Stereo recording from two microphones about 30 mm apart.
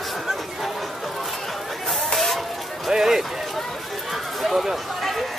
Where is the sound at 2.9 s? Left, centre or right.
Centre.